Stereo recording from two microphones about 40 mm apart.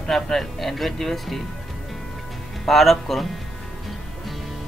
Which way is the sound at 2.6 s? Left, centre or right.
Centre.